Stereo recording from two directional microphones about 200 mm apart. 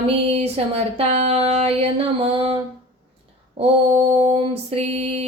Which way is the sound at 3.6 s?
30° right (ahead or behind).